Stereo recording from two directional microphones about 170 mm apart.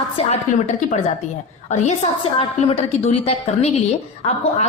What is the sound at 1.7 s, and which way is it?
A woman's voice, 45° left (ahead or behind).